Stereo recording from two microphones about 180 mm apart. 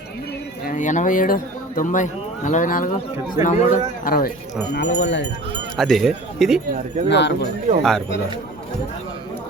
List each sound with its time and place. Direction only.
0.6 s a man's voice: 45° left (ahead or behind)
4.7 s speech: 70° left (ahead or behind)
5.7 s a man's voice: centre (ahead or behind)
7.1 s speech: 75° left (ahead or behind)
7.8 s a man's voice: centre (ahead or behind)